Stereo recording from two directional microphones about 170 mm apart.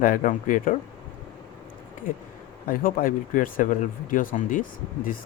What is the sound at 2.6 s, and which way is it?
Speech, 55° left (ahead or behind).